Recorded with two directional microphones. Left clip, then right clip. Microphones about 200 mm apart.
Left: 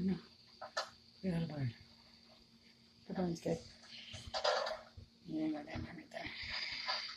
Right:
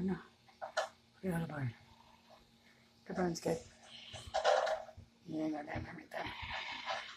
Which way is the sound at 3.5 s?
15° left (ahead or behind).